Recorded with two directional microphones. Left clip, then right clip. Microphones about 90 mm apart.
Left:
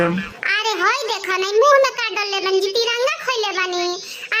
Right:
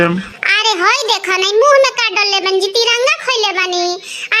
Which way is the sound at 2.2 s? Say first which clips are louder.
Right 4 dB; 35° right (ahead or behind).